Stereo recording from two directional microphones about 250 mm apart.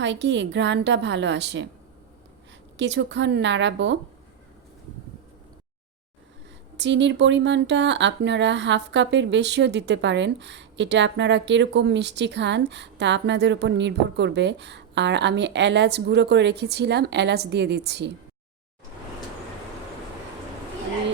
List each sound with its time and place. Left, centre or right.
0.0 s speech: right
2.7 s speech: right
6.7 s speech: right